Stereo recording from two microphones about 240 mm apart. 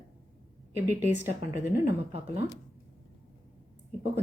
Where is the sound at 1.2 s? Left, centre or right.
Centre.